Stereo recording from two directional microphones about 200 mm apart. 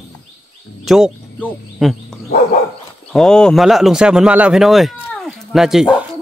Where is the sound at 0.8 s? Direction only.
Centre (ahead or behind).